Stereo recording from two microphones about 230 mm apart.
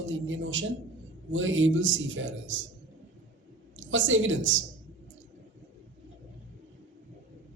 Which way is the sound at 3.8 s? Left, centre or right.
Right.